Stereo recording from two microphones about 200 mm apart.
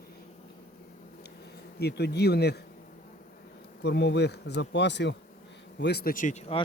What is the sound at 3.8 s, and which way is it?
Speech, 60° left (ahead or behind).